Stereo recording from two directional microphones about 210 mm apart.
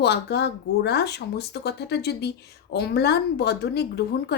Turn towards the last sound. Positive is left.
turn(degrees=50)  # may be behind; listen again after turning